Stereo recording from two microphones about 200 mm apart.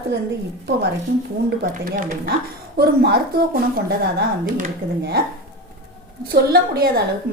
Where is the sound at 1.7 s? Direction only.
40° right (ahead or behind).